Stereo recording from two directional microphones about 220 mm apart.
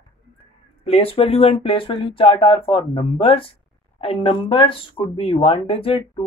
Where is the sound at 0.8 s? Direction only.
25° left (ahead or behind).